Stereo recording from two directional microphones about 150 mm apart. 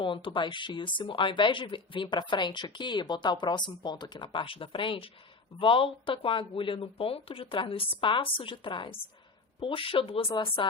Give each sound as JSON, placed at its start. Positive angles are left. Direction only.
{"t": 0.0, "sound": "speech", "side_deg": 35}